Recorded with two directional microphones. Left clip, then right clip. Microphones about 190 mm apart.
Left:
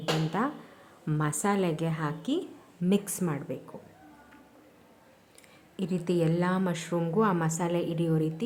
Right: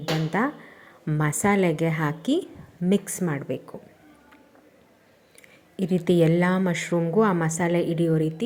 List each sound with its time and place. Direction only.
0.3 s a woman's voice: 20° right (ahead or behind)
5.7 s a woman's voice: 15° right (ahead or behind)